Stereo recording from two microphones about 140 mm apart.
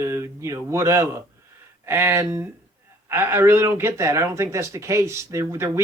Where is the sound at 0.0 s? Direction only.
20° right (ahead or behind).